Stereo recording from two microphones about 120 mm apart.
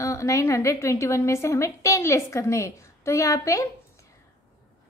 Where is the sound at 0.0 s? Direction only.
25° left (ahead or behind).